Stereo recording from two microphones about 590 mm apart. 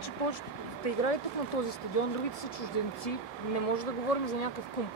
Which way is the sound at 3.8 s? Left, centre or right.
Left.